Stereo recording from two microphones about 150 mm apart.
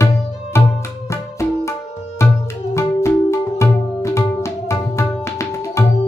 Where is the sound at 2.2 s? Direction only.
20° left (ahead or behind).